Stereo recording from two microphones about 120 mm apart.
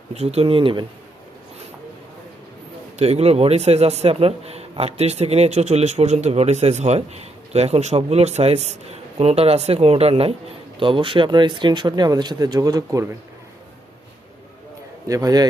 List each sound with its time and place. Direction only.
0.1 s speech: 60° right (ahead or behind)
3.0 s a man's voice: 60° right (ahead or behind); by 13.1 s 30° right (ahead or behind)
15.0 s speech: 30° right (ahead or behind)